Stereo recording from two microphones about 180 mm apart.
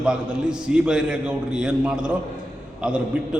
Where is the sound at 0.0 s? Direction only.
5° right (ahead or behind).